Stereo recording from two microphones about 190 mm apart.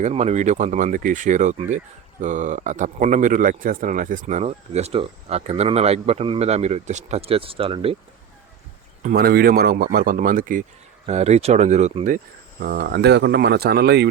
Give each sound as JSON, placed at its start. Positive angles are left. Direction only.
{"t": 0.0, "sound": "speech", "side_deg": -35}
{"t": 9.0, "sound": "speech", "side_deg": -55}
{"t": 11.0, "sound": "speech", "side_deg": -35}